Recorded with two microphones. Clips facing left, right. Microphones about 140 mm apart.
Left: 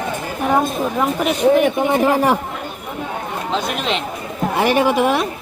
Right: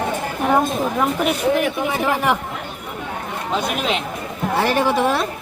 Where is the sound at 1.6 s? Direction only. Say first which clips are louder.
Left 5 dB; 45° left (ahead or behind).